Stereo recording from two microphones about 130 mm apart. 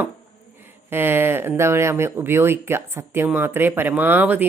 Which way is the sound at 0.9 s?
15° right (ahead or behind).